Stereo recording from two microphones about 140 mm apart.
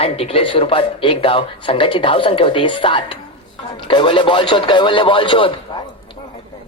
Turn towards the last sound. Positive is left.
turn(degrees=35)  # may be behind; listen again after turning